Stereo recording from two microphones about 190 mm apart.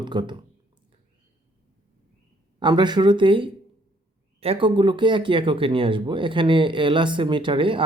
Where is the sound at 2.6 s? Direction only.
25° right (ahead or behind).